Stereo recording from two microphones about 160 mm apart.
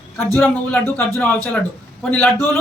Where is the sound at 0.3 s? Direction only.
10° left (ahead or behind).